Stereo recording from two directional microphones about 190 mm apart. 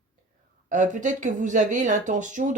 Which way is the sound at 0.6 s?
40° right (ahead or behind).